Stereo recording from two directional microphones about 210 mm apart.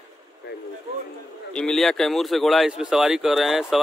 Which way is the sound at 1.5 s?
5° left (ahead or behind).